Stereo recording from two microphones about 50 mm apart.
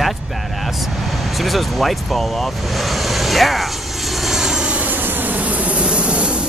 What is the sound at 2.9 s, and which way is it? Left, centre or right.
Vehicle, centre.